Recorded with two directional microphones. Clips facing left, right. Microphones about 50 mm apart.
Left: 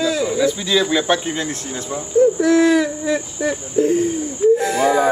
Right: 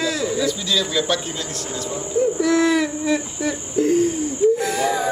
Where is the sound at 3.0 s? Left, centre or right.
Centre.